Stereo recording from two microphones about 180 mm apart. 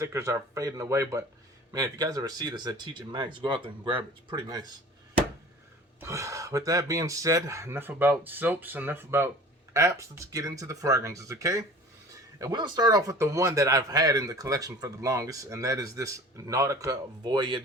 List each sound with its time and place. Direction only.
0.0 s speech: 15° right (ahead or behind)
6.0 s speech: 15° right (ahead or behind)